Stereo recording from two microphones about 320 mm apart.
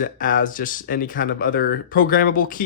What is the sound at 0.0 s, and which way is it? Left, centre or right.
Speech, left.